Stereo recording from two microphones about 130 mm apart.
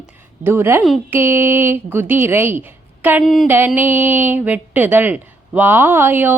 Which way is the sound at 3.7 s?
15° right (ahead or behind).